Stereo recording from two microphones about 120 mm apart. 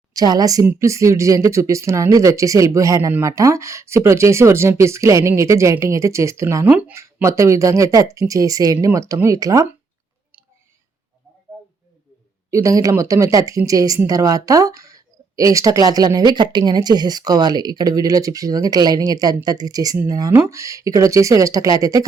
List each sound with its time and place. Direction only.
0.1 s speech: 30° right (ahead or behind)
6.7 s speech: 10° right (ahead or behind)
6.9 s speech: 25° right (ahead or behind)
12.5 s speech: 25° right (ahead or behind)